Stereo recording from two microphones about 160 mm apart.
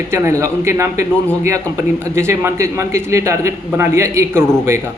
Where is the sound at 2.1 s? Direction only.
15° right (ahead or behind).